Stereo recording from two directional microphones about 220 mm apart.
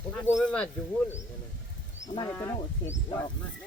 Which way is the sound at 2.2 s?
10° left (ahead or behind).